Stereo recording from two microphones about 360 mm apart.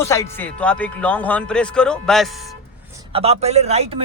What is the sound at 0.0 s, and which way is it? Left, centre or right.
A man's voice, centre.